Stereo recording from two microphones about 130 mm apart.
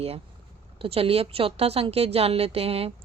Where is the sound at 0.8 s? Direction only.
45° right (ahead or behind).